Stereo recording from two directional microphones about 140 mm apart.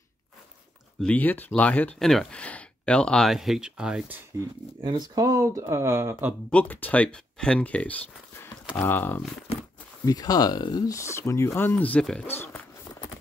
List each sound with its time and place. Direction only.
1.0 s speech: 10° left (ahead or behind); by 4.2 s 5° right (ahead or behind)
4.8 s speech: 30° right (ahead or behind)
6.5 s speech: 10° left (ahead or behind)
10.0 s speech: 25° left (ahead or behind)